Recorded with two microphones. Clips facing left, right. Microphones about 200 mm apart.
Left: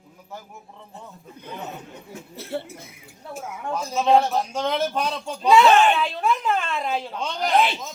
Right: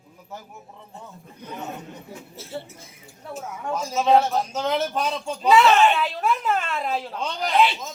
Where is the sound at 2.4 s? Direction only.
65° left (ahead or behind).